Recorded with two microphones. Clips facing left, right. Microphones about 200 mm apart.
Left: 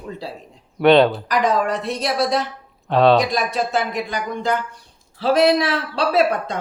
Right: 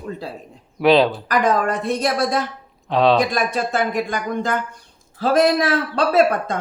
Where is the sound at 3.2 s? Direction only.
50° right (ahead or behind).